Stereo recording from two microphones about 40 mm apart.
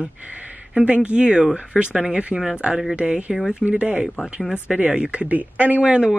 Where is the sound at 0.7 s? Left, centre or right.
Right.